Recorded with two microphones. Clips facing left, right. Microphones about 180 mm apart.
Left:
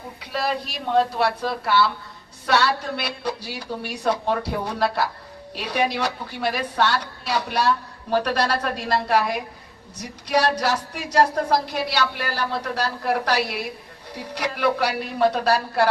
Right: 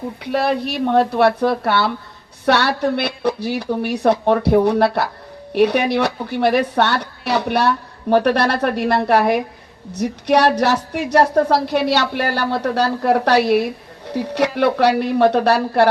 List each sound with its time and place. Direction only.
0.2 s a woman's voice: 60° right (ahead or behind)